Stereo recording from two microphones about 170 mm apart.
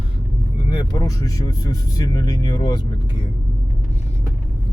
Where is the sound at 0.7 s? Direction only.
25° left (ahead or behind).